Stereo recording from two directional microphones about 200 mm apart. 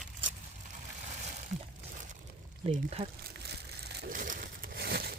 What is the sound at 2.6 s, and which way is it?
Speech, 30° right (ahead or behind).